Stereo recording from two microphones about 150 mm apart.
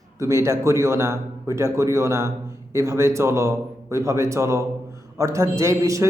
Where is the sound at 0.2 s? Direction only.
20° right (ahead or behind).